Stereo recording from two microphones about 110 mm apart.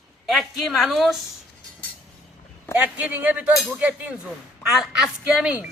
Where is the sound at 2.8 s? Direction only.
15° right (ahead or behind).